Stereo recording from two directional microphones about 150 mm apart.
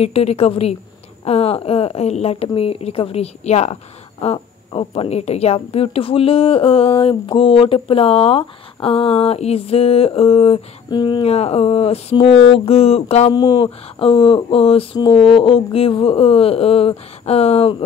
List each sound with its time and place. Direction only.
0.0 s speech: 45° left (ahead or behind)
11.2 s speech: 45° left (ahead or behind)
13.3 s speech: 30° left (ahead or behind)